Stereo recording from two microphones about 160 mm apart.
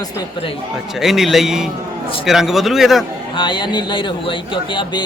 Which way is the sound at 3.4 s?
30° left (ahead or behind).